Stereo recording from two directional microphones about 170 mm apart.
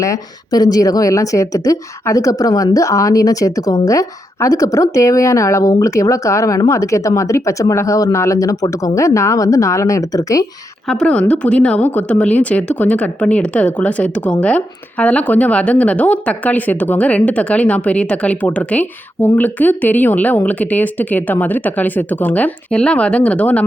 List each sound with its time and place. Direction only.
0.0 s speech: 20° left (ahead or behind)
10.8 s speech: 5° left (ahead or behind)